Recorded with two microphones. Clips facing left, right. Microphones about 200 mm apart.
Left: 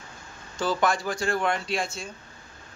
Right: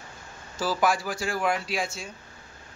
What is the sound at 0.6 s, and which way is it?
A man's voice, 5° right (ahead or behind).